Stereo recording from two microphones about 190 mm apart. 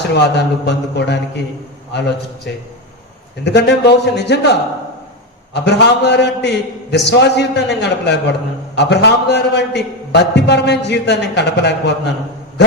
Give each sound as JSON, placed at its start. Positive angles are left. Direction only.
{"t": 0.1, "sound": "a man's voice", "side_deg": 65}
{"t": 3.4, "sound": "a man's voice", "side_deg": 65}
{"t": 5.5, "sound": "a man's voice", "side_deg": 65}